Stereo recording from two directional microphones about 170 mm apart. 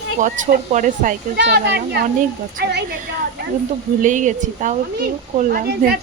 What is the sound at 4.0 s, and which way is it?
Speech, 50° right (ahead or behind).